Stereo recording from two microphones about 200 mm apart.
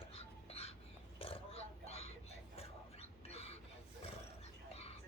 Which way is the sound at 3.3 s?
30° left (ahead or behind).